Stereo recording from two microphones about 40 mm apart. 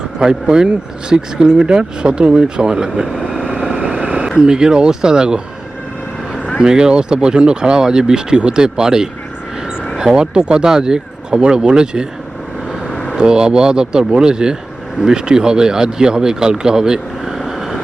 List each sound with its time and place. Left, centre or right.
0.2 s speech: right
3.6 s vehicle: right
3.9 s a sound: right
4.4 s speech: centre
6.6 s speech: centre
13.1 s speech: right
17.3 s vehicle: centre